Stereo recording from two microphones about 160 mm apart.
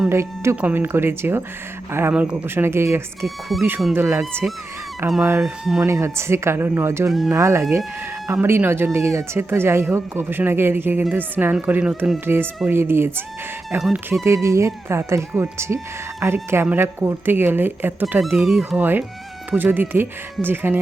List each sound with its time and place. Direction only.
0.1 s speech: 15° right (ahead or behind)
3.2 s speech: centre (ahead or behind)
3.9 s speech: 15° right (ahead or behind)
5.4 s speech: 5° right (ahead or behind)
5.8 s speech: 15° right (ahead or behind)
13.7 s speech: 5° right (ahead or behind)
14.1 s speech: 20° right (ahead or behind)
18.2 s speech: centre (ahead or behind)